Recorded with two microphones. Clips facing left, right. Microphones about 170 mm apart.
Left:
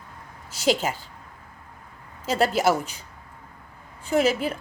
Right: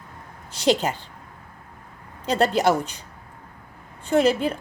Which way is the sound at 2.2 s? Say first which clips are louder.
Right 2 dB; 5° left (ahead or behind).